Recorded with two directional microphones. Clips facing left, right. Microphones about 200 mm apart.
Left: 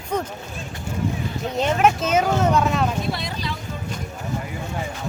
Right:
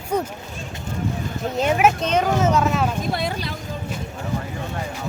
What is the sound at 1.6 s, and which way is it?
Speech, 10° right (ahead or behind).